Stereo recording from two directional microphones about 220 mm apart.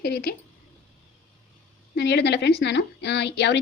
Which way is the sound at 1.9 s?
50° left (ahead or behind).